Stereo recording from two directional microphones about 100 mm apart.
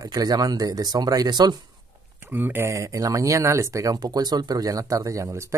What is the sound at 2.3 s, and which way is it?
Speech, 20° right (ahead or behind).